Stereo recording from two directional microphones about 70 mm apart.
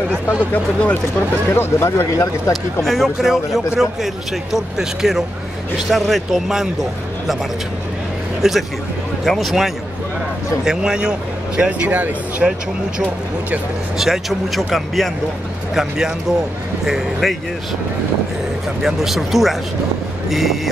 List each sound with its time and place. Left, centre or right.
0.5 s speech: left
1.5 s speech: left
2.5 s a man's voice: centre
8.4 s a man's voice: centre; by 12.4 s right
13.9 s a man's voice: centre
18.8 s a man's voice: centre
20.2 s vehicle: centre